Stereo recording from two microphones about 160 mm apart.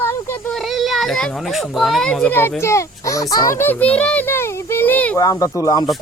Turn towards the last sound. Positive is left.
turn(degrees=20)  # may be behind; listen again after turning